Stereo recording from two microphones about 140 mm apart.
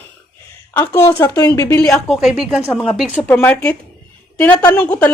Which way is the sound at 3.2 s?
15° left (ahead or behind).